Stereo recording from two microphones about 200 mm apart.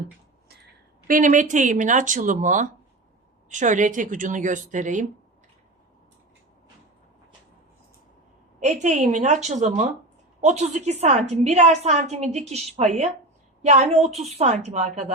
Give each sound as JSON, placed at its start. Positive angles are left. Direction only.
{"t": 1.0, "sound": "a woman's voice", "side_deg": -40}
{"t": 8.6, "sound": "a woman's voice", "side_deg": -35}